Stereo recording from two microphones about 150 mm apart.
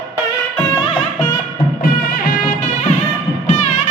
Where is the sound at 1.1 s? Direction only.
20° left (ahead or behind).